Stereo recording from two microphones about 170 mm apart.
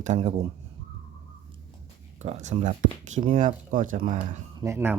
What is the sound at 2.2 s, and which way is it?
Speech, 45° right (ahead or behind).